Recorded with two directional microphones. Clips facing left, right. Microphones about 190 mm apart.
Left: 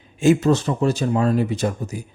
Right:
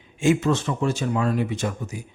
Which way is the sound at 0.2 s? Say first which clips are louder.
Left 4 dB; 35° left (ahead or behind).